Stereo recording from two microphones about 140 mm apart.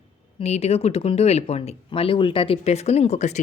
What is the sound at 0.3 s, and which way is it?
Speech, 50° left (ahead or behind).